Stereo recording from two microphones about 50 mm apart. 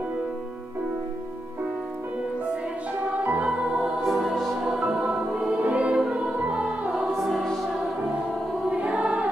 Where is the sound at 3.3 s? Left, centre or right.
Right.